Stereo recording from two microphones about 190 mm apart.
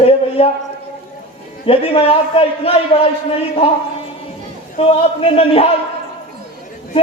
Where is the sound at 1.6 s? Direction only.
30° left (ahead or behind).